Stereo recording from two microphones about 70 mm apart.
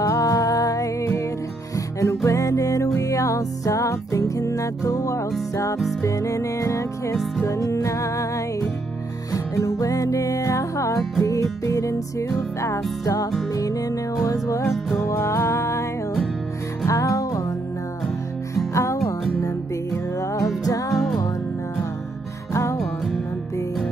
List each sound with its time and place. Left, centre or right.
0.0 s music: left
16.8 s music: left
18.5 s music: left
20.9 s music: centre
22.5 s music: left